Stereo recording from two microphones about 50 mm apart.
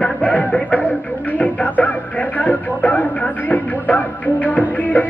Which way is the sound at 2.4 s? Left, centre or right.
Left.